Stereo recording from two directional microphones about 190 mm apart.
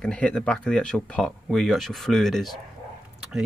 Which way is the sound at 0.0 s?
5° left (ahead or behind).